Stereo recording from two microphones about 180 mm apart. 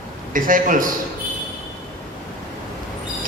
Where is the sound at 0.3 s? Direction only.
50° right (ahead or behind).